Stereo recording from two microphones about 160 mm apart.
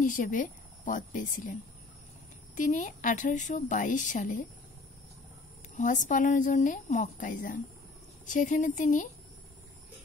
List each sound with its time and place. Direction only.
0.0 s speech: 55° left (ahead or behind)
2.5 s a woman's voice: 50° left (ahead or behind)
5.8 s a woman's voice: 50° left (ahead or behind)